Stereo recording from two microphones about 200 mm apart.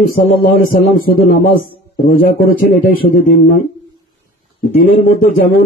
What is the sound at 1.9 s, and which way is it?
A man's voice, 45° left (ahead or behind).